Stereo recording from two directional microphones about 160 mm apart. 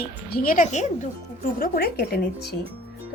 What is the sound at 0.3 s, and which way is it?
Speech, 65° left (ahead or behind).